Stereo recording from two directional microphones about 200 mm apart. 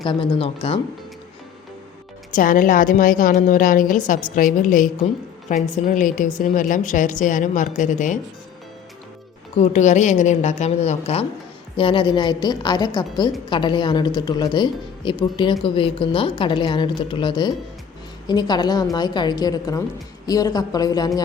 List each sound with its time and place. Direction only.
0.0 s a woman's voice: 25° left (ahead or behind)
2.3 s a woman's voice: 45° left (ahead or behind)
9.6 s a woman's voice: 35° left (ahead or behind); by 21.1 s 20° left (ahead or behind)